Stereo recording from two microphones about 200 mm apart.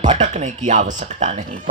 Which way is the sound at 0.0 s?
35° right (ahead or behind).